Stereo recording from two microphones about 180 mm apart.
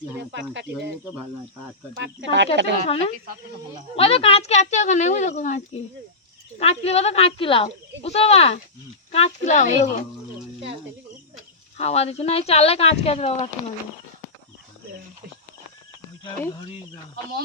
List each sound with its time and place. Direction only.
0.2 s speech: 75° right (ahead or behind)
2.0 s speech: 80° right
2.8 s a woman's voice: 35° left (ahead or behind)
11.8 s a woman's voice: 35° left (ahead or behind)